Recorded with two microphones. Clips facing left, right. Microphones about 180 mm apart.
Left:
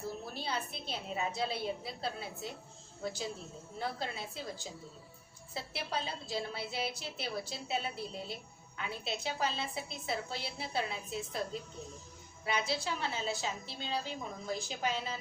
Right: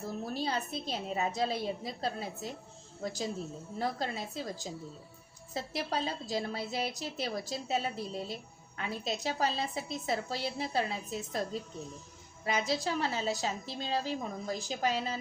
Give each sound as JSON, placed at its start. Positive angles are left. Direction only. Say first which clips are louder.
{"t": 0.3, "sound": "a woman's voice", "louder": "right 5 dB", "side_deg": -40}
{"t": 12.5, "sound": "a woman's voice", "louder": "right 3 dB", "side_deg": -40}